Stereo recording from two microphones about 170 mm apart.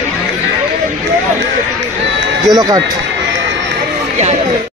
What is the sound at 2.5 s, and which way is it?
Speech, 20° right (ahead or behind).